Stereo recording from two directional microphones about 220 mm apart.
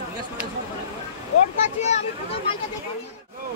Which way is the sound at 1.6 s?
30° left (ahead or behind).